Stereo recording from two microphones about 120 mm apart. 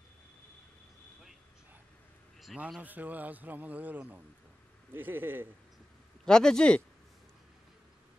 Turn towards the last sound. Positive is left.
turn(degrees=5)  # may be behind; listen again after turning